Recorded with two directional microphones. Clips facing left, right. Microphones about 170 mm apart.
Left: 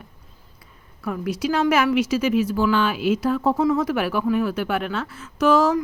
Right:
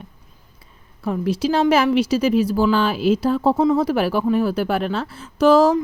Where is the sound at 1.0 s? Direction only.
30° right (ahead or behind).